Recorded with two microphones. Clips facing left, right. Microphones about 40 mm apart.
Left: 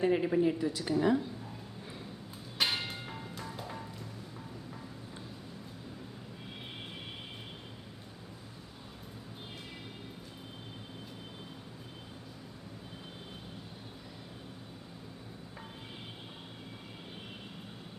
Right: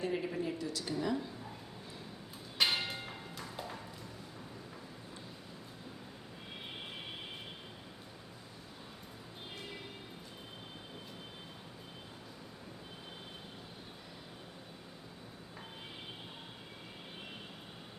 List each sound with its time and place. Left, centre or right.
0.0 s a woman's voice: left
2.6 s bell: centre